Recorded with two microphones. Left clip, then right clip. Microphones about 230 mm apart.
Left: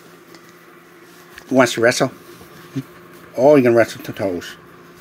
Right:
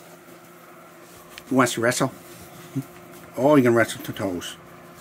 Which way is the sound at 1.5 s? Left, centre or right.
Centre.